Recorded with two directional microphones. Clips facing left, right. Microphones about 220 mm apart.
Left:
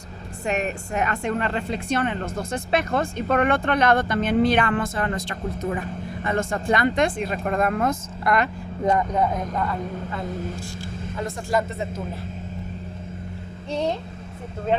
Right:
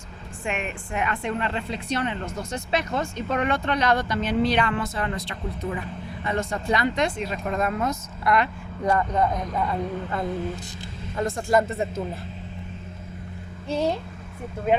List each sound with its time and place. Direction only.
0.4 s a woman's voice: 40° left (ahead or behind)
8.8 s speech: 20° left (ahead or behind)
9.1 s speech: 5° left (ahead or behind)
11.2 s speech: 50° right (ahead or behind)
13.7 s speech: 5° right (ahead or behind)